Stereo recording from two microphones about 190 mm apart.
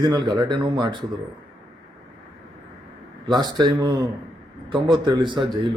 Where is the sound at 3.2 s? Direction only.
20° right (ahead or behind).